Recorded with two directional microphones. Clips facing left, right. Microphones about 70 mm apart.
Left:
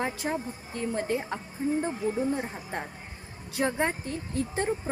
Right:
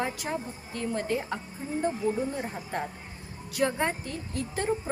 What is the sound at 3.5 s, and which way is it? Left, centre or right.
Speech, left.